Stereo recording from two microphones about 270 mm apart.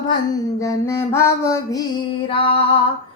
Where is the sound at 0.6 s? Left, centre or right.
Centre.